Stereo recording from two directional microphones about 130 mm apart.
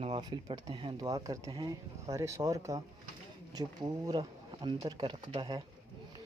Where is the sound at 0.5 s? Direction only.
35° right (ahead or behind).